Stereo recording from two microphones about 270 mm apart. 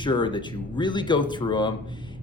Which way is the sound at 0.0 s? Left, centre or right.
Centre.